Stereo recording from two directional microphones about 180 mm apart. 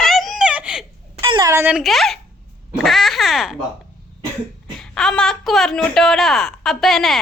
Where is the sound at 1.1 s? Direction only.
30° right (ahead or behind).